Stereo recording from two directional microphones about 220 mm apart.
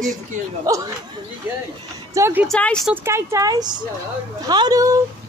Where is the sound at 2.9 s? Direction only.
10° right (ahead or behind).